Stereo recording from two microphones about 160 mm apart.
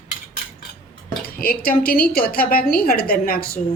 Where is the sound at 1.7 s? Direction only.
70° left (ahead or behind).